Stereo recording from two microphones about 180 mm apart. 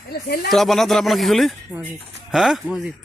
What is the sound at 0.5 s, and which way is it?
Speech, centre (ahead or behind).